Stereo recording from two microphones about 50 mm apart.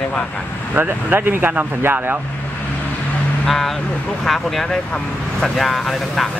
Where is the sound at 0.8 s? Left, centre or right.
Right.